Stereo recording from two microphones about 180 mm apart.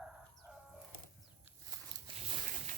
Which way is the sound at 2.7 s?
40° right (ahead or behind).